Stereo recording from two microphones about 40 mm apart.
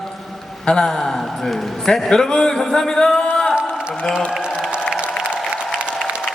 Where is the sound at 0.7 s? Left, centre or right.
Left.